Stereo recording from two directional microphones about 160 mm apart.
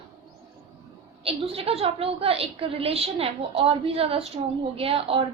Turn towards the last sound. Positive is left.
turn(degrees=-35)  # may be behind; listen again after turning